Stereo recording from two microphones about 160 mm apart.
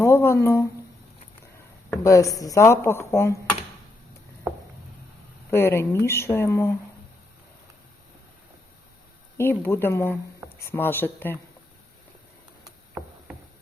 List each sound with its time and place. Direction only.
0.0 s speech: 15° left (ahead or behind)
2.0 s a woman's voice: 20° left (ahead or behind)
5.5 s speech: 15° left (ahead or behind)
9.4 s speech: 15° left (ahead or behind)